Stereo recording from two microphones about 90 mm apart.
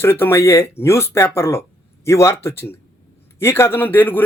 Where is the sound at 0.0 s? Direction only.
25° left (ahead or behind).